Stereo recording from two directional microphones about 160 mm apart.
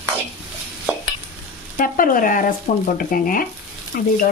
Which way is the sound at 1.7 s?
60° left (ahead or behind).